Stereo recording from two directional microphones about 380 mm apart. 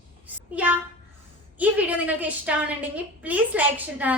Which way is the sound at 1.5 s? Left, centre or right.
Centre.